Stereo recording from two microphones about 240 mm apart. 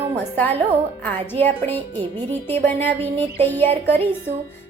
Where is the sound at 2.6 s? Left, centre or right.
Centre.